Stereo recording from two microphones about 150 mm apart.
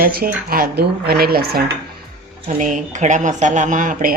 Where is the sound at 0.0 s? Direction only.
80° right.